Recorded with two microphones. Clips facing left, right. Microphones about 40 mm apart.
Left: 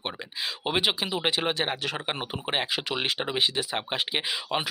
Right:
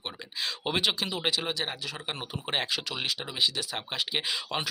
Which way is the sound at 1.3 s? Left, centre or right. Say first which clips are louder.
Left 5 dB; left.